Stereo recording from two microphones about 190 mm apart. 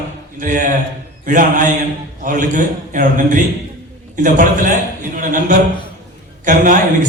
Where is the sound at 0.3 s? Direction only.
45° right (ahead or behind).